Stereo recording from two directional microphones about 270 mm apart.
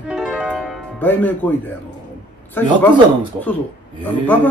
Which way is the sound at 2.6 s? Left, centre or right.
Centre.